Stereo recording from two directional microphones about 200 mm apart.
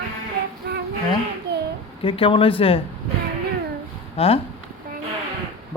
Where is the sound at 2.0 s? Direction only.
25° left (ahead or behind).